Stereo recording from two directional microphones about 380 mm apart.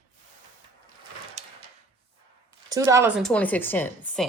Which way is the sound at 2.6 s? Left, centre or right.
Centre.